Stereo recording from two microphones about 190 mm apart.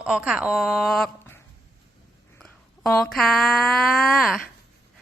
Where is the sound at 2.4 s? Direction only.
5° left (ahead or behind).